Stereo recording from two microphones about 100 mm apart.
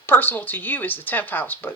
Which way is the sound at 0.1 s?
20° left (ahead or behind).